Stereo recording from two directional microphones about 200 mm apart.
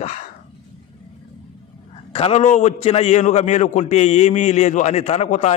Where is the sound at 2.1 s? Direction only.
30° left (ahead or behind).